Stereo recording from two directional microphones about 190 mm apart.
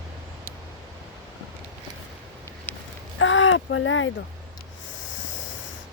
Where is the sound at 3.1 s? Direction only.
90° left.